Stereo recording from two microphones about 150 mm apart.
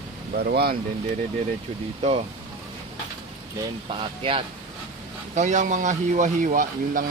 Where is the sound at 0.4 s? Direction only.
90° right.